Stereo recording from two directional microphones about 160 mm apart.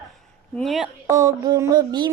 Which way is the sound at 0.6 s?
Centre (ahead or behind).